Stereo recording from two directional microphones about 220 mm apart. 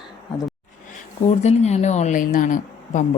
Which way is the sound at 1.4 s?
30° left (ahead or behind).